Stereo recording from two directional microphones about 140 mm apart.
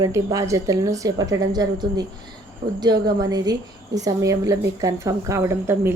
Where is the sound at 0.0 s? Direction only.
25° right (ahead or behind).